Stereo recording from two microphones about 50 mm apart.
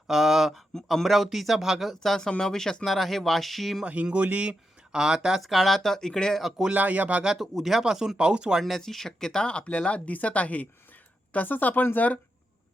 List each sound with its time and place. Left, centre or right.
0.1 s speech: centre
2.0 s speech: centre
3.8 s speech: right
5.4 s speech: centre
6.7 s speech: right
7.3 s speech: centre
8.6 s speech: centre; by 12.2 s left